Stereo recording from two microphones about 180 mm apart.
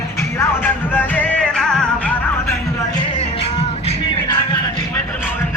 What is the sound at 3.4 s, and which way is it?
Music, 30° left (ahead or behind).